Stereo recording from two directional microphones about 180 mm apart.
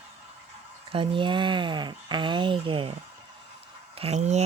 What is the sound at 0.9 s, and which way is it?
Speech, 30° right (ahead or behind).